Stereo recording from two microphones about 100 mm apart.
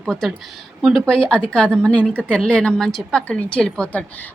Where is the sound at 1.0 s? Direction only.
10° left (ahead or behind).